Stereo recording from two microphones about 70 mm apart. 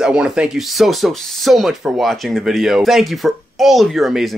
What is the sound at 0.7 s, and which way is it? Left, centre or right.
Speech, centre.